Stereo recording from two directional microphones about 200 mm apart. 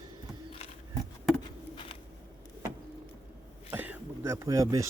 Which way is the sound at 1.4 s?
25° left (ahead or behind).